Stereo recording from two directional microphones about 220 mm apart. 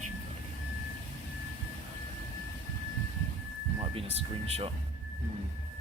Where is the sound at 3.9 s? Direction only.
25° right (ahead or behind).